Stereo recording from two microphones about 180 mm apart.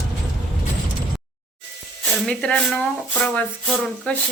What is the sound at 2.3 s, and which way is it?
Speech, 5° left (ahead or behind).